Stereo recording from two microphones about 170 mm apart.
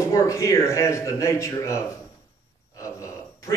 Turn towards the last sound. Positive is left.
turn(degrees=20)  # may be behind; listen again after turning